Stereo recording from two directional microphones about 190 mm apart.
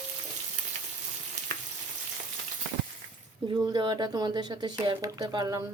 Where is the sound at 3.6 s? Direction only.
20° right (ahead or behind).